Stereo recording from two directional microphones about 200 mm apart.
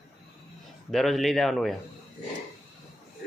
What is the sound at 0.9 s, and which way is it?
Speech, centre (ahead or behind).